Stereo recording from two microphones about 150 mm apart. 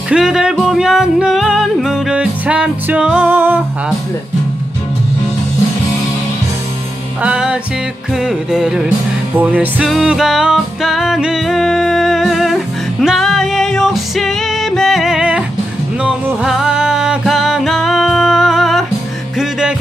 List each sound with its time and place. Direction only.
0.1 s music: 5° right (ahead or behind)
7.2 s music: 5° right (ahead or behind)